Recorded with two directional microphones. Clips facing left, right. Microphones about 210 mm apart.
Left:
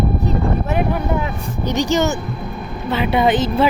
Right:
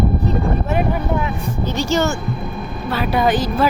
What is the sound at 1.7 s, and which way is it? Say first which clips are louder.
A woman's voice: left 2 dB; 15° left (ahead or behind).